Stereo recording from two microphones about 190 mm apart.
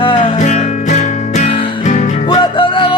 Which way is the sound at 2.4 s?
25° left (ahead or behind).